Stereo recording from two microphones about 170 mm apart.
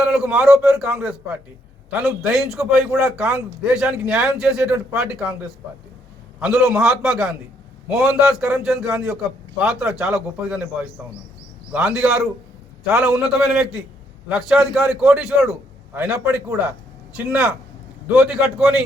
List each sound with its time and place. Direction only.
0.0 s a man's voice: 5° right (ahead or behind)